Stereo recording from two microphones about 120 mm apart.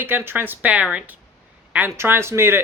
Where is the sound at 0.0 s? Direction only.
20° right (ahead or behind).